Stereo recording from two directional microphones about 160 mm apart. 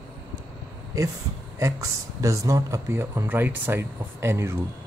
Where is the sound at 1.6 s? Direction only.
20° right (ahead or behind).